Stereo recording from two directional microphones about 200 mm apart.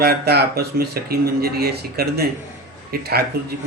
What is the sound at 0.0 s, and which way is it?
Speech, 55° right (ahead or behind).